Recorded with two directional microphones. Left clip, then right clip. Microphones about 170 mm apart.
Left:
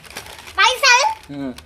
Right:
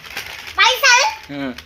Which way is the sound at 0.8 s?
25° left (ahead or behind).